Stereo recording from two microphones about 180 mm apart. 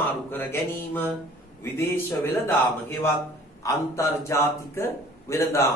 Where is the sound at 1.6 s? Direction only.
15° left (ahead or behind).